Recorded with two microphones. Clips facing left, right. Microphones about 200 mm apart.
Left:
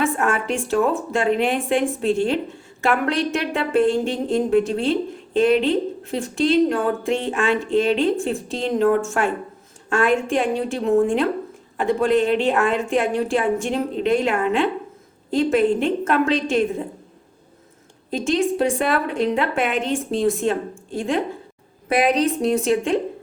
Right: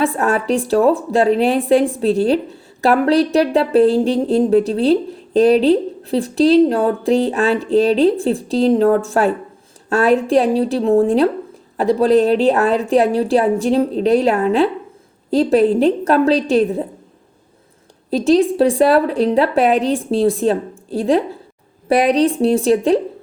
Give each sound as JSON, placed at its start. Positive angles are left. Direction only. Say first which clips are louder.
{"t": 0.0, "sound": "a woman's voice", "louder": "right 4 dB", "side_deg": -35}
{"t": 18.1, "sound": "a woman's voice", "louder": "right 7 dB", "side_deg": -35}